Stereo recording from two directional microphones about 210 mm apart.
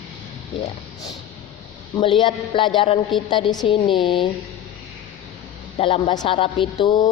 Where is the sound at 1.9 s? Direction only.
25° left (ahead or behind).